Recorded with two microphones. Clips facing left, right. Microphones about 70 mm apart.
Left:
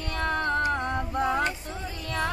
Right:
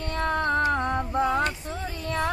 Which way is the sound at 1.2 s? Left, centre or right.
Left.